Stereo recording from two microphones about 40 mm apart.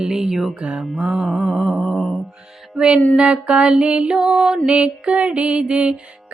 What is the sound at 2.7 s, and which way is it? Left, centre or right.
Music, right.